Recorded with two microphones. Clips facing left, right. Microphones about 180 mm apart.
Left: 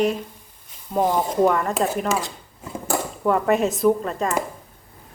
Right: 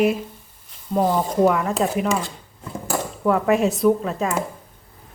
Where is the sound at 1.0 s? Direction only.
15° left (ahead or behind).